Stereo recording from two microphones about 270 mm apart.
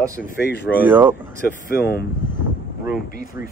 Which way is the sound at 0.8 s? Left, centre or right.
Centre.